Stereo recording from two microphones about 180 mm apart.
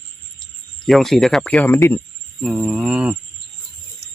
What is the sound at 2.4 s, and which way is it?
Speech, 5° right (ahead or behind).